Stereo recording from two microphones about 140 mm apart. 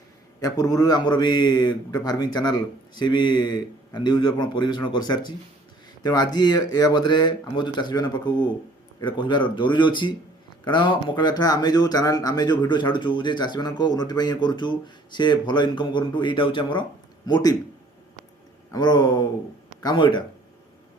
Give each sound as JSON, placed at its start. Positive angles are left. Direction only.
{"t": 0.4, "sound": "a man's voice", "side_deg": 25}
{"t": 18.7, "sound": "speech", "side_deg": 30}